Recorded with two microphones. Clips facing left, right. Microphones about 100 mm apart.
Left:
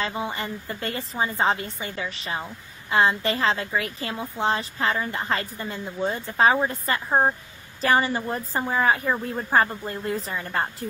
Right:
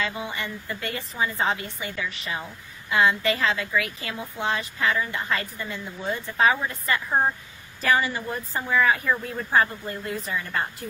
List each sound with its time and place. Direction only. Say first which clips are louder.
0.0 s a woman's voice: left 2 dB; 30° left (ahead or behind)